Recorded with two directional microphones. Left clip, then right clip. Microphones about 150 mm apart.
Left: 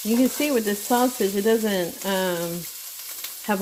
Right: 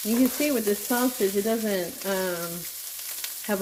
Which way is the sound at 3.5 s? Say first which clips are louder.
Left 2 dB; 90° left.